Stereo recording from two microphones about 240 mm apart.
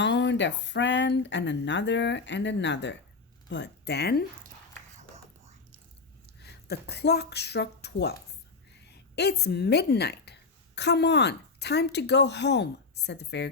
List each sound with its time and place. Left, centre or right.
0.0 s speech: left
6.4 s speech: left
9.1 s a woman's voice: left